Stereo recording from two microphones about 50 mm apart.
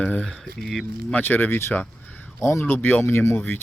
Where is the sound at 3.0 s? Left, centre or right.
Left.